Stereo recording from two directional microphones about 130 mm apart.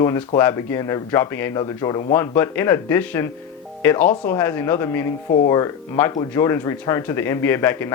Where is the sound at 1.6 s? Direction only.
30° left (ahead or behind).